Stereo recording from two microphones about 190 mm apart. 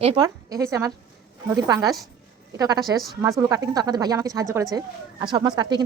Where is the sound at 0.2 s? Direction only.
15° right (ahead or behind).